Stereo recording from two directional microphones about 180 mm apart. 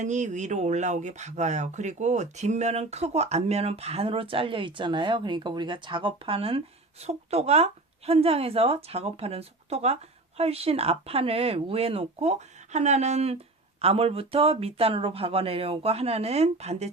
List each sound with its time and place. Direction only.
0.0 s speech: 40° right (ahead or behind)